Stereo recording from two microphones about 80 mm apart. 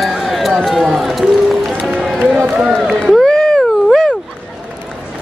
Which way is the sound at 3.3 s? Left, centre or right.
Centre.